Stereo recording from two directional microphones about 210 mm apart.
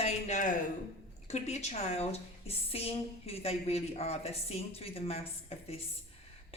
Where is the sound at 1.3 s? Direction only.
30° left (ahead or behind).